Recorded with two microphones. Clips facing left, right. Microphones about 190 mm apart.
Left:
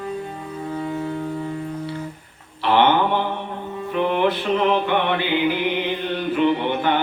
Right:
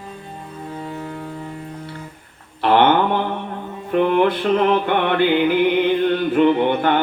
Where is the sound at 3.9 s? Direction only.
50° right (ahead or behind).